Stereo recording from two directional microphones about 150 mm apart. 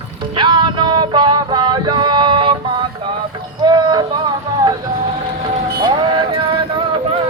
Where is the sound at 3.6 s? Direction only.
30° right (ahead or behind).